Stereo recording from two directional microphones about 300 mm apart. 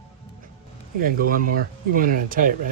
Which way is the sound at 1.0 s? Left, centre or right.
Right.